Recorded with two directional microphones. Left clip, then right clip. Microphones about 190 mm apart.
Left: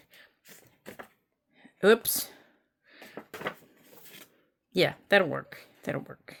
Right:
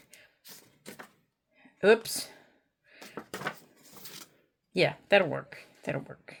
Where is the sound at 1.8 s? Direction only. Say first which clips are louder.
Left 1 dB; 35° left (ahead or behind).